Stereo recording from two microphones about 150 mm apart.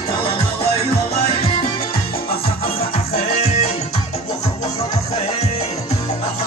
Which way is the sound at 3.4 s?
50° left (ahead or behind).